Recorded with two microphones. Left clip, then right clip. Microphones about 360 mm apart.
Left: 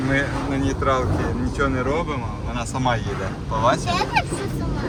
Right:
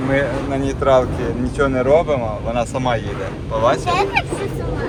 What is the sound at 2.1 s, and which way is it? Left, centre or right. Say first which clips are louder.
Speech: right 9 dB; centre.